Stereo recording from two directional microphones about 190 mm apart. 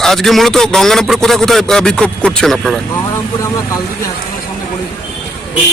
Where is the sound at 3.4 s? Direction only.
15° left (ahead or behind).